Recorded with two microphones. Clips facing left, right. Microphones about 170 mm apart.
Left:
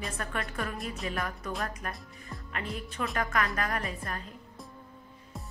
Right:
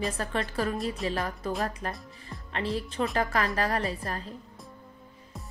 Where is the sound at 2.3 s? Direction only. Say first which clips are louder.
Even; centre (ahead or behind).